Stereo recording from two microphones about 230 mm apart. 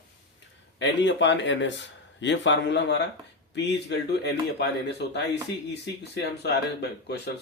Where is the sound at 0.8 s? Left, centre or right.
Left.